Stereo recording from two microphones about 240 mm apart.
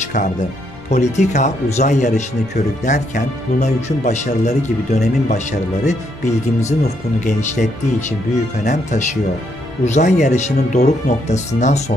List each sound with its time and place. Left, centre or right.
0.8 s speech: left
8.6 s speech: left